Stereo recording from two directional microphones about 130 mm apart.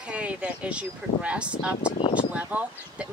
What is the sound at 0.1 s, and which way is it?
Speech, 10° right (ahead or behind).